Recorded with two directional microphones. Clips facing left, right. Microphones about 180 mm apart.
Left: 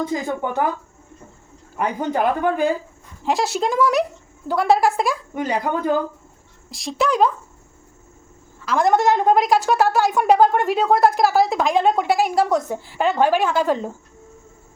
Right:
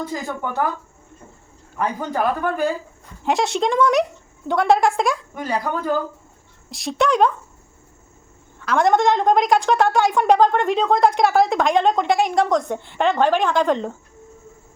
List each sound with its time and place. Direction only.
0.0 s speech: 20° left (ahead or behind)
1.8 s speech: 15° left (ahead or behind)
3.2 s a woman's voice: centre (ahead or behind)
5.3 s a woman's voice: 20° left (ahead or behind)
6.7 s a woman's voice: centre (ahead or behind)
8.6 s a woman's voice: centre (ahead or behind)